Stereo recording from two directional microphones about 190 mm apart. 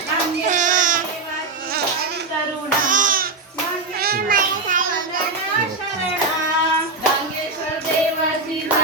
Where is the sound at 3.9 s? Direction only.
55° right (ahead or behind).